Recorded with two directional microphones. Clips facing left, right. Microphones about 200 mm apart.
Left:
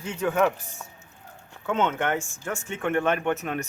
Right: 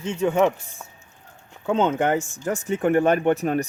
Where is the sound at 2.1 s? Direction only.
20° right (ahead or behind).